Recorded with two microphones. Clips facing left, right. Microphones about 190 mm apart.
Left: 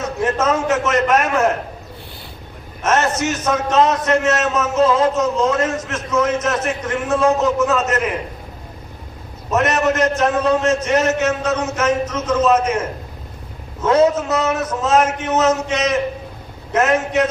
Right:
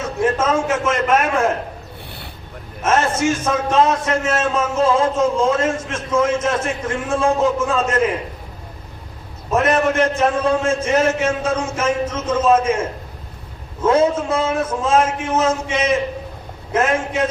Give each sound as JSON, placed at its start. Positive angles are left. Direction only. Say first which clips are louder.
{"t": 0.3, "sound": "a man's voice", "louder": "left 1 dB", "side_deg": -30}
{"t": 2.8, "sound": "a man's voice", "louder": "right 1 dB", "side_deg": -30}
{"t": 9.5, "sound": "a man's voice", "louder": "even", "side_deg": -30}
{"t": 13.8, "sound": "a man's voice", "louder": "left 1 dB", "side_deg": -30}